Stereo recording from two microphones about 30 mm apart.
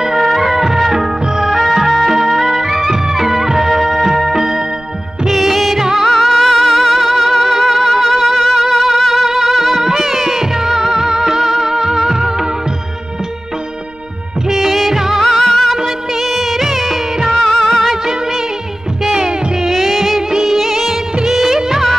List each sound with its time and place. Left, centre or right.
0.0 s music: centre
1.2 s music: centre
1.5 s music: centre
5.2 s music of bollywood: centre
6.0 s music: centre
10.3 s music: centre
14.5 s music of bollywood: centre
15.1 s music: centre
17.3 s music: centre
19.7 s music: centre
20.2 s music: centre